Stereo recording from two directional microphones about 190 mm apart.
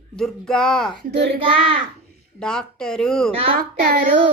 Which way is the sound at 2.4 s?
5° left (ahead or behind).